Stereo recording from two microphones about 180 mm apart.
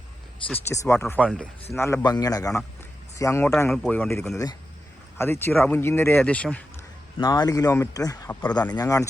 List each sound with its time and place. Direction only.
0.4 s speech: 15° left (ahead or behind)
3.7 s speech: 5° left (ahead or behind)
7.2 s speech: 25° left (ahead or behind)